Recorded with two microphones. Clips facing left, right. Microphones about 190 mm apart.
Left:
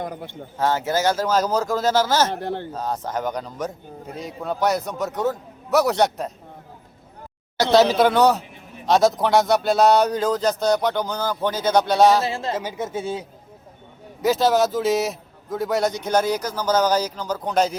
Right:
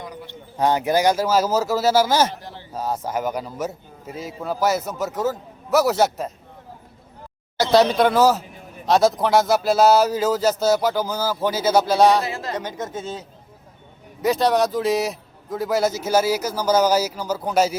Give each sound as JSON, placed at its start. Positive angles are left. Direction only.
{"t": 0.0, "sound": "a man's voice", "side_deg": 50}
{"t": 0.5, "sound": "speech", "side_deg": -15}
{"t": 2.3, "sound": "speech", "side_deg": 60}
{"t": 2.7, "sound": "speech", "side_deg": -10}
{"t": 7.6, "sound": "speech", "side_deg": 0}
{"t": 12.2, "sound": "speech", "side_deg": 25}
{"t": 12.5, "sound": "speech", "side_deg": 10}